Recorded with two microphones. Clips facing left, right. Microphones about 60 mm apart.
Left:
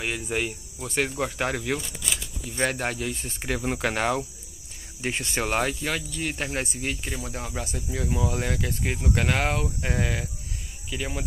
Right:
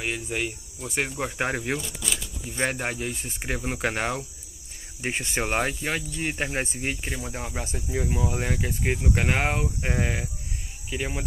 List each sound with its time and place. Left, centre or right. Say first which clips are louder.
0.0 s speech: left 1 dB; centre
1.4 s speech: right 1 dB; right
2.5 s speech: left 1 dB; centre
5.0 s speech: even; centre
8.1 s speech: left 3 dB; centre; by 11.1 s right